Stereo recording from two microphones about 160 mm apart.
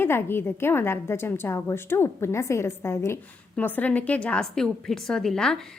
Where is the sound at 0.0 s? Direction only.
15° left (ahead or behind).